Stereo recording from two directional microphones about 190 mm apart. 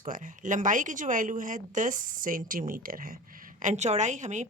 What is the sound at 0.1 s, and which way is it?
Speech, 40° right (ahead or behind).